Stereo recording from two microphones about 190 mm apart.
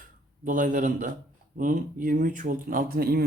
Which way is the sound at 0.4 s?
45° right (ahead or behind).